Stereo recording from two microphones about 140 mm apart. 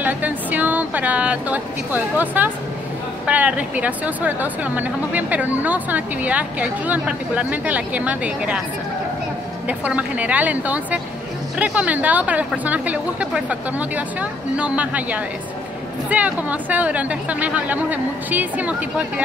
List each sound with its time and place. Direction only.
0.0 s a woman's voice: 10° right (ahead or behind)
9.7 s a woman's voice: 10° right (ahead or behind)